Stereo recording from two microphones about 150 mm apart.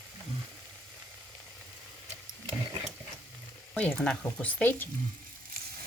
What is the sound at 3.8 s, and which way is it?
Speech, 10° left (ahead or behind).